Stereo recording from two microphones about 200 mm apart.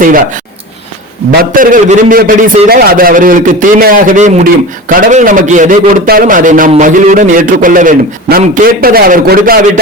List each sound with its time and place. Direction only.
0.0 s a man's voice: 45° right (ahead or behind)
1.3 s a man's voice: 45° right (ahead or behind)